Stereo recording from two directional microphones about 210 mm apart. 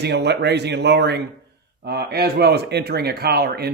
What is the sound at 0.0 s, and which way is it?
A man's voice, 50° right (ahead or behind).